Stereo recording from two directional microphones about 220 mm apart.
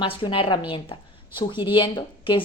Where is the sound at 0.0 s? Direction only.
20° left (ahead or behind).